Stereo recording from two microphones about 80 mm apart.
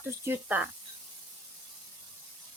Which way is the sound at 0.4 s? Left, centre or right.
Centre.